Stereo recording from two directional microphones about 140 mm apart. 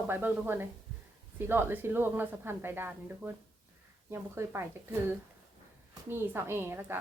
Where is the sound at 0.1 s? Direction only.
15° right (ahead or behind).